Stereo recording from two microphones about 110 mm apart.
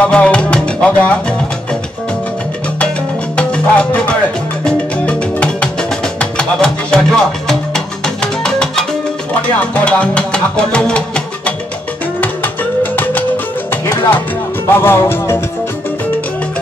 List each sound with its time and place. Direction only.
0.0 s music: 10° left (ahead or behind)
3.3 s music: 10° left (ahead or behind)
12.9 s music: 15° left (ahead or behind)
14.7 s music: 20° left (ahead or behind)